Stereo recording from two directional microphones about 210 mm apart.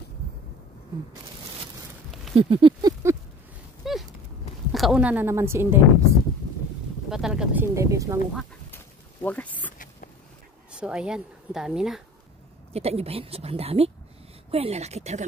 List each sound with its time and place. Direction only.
2.3 s speech: 25° right (ahead or behind)
3.8 s horse: centre (ahead or behind)
4.7 s speech: centre (ahead or behind)
8.4 s duck: 5° left (ahead or behind)
10.7 s speech: 5° right (ahead or behind)
12.7 s a woman's voice: 30° right (ahead or behind)